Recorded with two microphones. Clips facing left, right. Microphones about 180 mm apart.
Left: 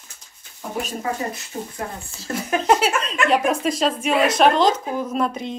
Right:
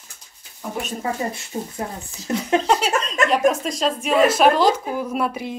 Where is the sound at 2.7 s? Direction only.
5° left (ahead or behind).